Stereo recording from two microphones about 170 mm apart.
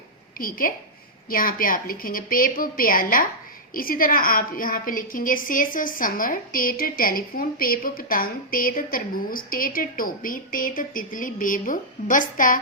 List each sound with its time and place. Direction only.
0.3 s a woman's voice: 55° left (ahead or behind)